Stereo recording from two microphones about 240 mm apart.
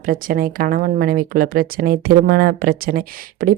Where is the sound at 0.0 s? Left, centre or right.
Right.